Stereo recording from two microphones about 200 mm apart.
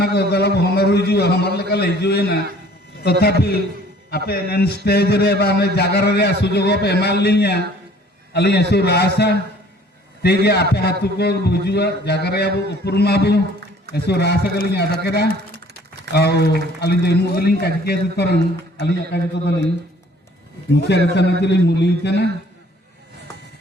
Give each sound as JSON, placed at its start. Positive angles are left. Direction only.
{"t": 0.0, "sound": "a man's voice", "side_deg": 55}
{"t": 20.7, "sound": "a man's voice", "side_deg": 55}